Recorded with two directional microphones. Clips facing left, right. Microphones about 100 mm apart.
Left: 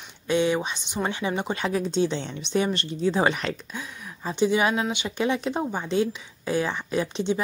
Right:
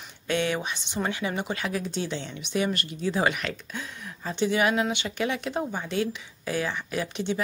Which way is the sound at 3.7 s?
15° left (ahead or behind).